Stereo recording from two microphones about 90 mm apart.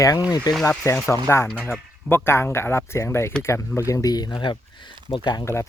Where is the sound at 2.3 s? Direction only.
30° left (ahead or behind); by 5.4 s 60° left (ahead or behind).